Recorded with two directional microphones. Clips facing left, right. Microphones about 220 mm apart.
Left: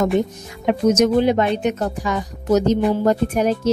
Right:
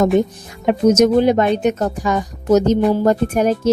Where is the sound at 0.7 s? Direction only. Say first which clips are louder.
Right 3 dB; 40° right (ahead or behind).